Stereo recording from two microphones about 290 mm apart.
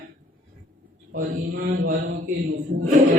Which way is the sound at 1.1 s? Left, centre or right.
Right.